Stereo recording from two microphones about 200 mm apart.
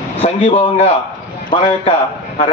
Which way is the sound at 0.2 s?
30° left (ahead or behind).